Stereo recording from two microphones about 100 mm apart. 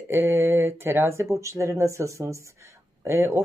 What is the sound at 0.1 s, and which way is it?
Speech, 25° right (ahead or behind).